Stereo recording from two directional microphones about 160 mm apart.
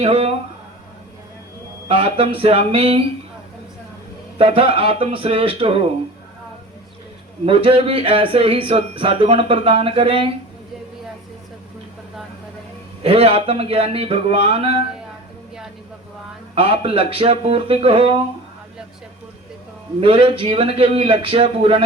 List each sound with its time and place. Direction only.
0.0 s speech: 40° right (ahead or behind)
1.9 s speech: 35° right (ahead or behind)
4.4 s speech: 35° right (ahead or behind)
7.4 s speech: 35° right (ahead or behind)
13.0 s speech: 40° right (ahead or behind)
16.6 s speech: 40° right (ahead or behind)
20.0 s speech: 35° right (ahead or behind)